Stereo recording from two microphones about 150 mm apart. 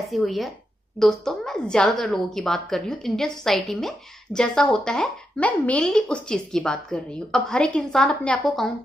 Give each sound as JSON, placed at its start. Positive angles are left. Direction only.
{"t": 0.0, "sound": "a woman's voice", "side_deg": 0}